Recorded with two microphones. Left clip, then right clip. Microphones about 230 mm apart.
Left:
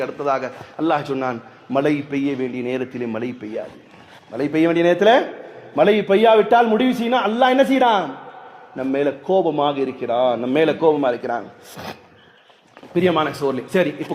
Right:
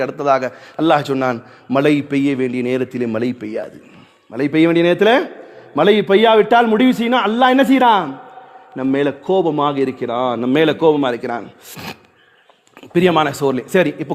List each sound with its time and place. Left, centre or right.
0.0 s a man's voice: right